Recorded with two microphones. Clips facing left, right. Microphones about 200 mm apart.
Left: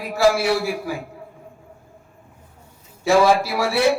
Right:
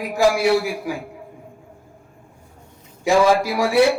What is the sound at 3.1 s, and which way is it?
Speech, 15° right (ahead or behind).